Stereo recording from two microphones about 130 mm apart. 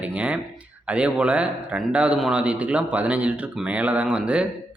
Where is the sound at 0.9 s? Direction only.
10° right (ahead or behind).